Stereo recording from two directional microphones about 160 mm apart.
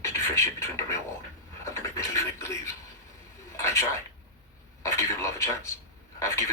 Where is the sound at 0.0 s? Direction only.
20° left (ahead or behind).